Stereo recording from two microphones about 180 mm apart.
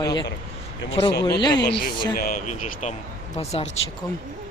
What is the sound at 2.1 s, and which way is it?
Speech, 50° left (ahead or behind).